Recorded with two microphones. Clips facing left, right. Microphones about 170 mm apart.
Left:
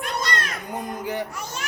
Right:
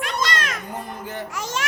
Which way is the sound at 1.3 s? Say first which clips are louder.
Right 5 dB; 90° right.